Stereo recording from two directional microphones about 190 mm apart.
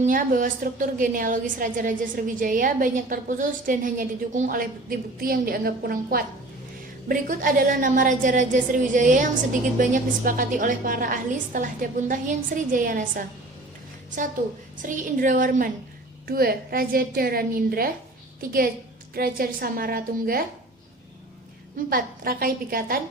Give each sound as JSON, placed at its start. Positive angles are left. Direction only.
{"t": 0.0, "sound": "a woman's voice", "side_deg": -45}
{"t": 14.8, "sound": "a woman's voice", "side_deg": -45}
{"t": 21.8, "sound": "a woman's voice", "side_deg": -50}